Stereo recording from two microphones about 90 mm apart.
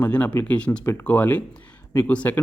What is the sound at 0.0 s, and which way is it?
Speech, 15° left (ahead or behind).